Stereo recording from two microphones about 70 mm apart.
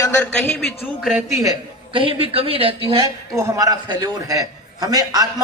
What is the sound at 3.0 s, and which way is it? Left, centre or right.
A man's voice, right.